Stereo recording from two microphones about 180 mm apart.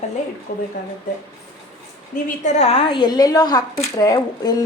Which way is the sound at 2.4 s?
40° left (ahead or behind).